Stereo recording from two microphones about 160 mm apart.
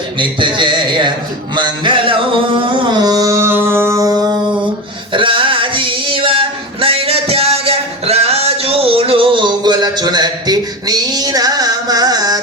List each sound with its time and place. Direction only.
0.2 s a man's voice: 30° right (ahead or behind)
1.5 s carnatic music: 30° right (ahead or behind)
5.1 s male singing: 30° right (ahead or behind)